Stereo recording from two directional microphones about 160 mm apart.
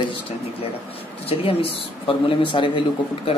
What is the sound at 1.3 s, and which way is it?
A man's voice, 35° left (ahead or behind).